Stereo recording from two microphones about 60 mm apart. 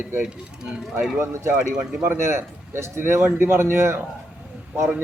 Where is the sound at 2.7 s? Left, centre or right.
Right.